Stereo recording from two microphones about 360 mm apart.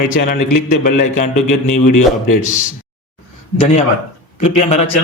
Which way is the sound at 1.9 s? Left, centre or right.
Left.